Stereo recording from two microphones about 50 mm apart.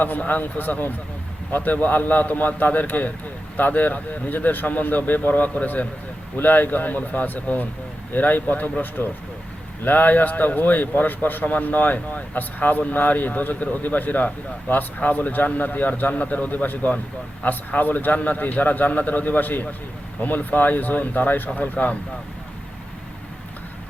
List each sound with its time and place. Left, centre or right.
0.0 s a man's voice: left